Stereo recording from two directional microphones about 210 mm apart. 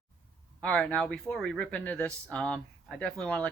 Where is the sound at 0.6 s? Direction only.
5° left (ahead or behind).